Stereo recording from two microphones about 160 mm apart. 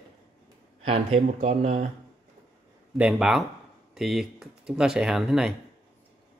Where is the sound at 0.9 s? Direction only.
45° right (ahead or behind).